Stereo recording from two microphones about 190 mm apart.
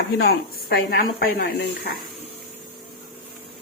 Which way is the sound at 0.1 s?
55° left (ahead or behind).